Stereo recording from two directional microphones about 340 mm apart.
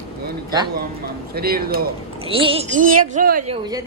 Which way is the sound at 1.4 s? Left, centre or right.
Right.